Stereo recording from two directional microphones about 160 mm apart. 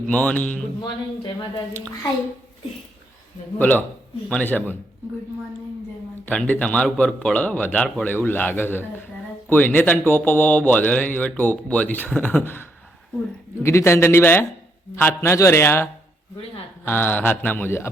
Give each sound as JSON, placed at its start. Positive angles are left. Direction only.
{"t": 0.1, "sound": "a man's voice", "side_deg": 10}
{"t": 0.8, "sound": "speech", "side_deg": 30}
{"t": 3.6, "sound": "a man's voice", "side_deg": 10}
{"t": 6.2, "sound": "a man's voice", "side_deg": 10}